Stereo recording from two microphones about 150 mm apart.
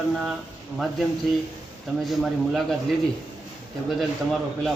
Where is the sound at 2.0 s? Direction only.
Centre (ahead or behind).